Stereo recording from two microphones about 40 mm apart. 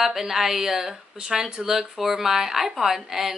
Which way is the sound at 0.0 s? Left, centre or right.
Centre.